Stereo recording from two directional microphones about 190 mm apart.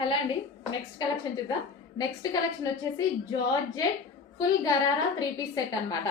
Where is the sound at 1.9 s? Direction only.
20° left (ahead or behind).